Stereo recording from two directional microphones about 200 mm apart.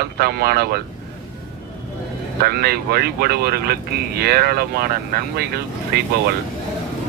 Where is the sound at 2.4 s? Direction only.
50° right (ahead or behind).